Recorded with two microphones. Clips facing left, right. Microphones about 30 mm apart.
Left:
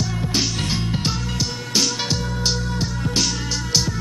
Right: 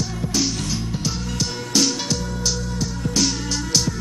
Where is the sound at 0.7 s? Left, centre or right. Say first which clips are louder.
Left 2 dB; left.